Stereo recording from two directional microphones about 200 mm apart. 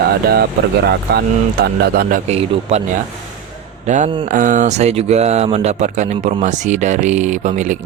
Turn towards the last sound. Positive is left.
turn(degrees=-35)  # may be behind; listen again after turning